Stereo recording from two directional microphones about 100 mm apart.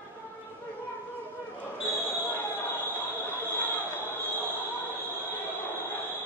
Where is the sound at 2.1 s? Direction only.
20° left (ahead or behind).